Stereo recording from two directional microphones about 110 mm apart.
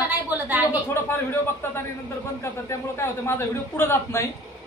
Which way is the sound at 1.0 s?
20° left (ahead or behind).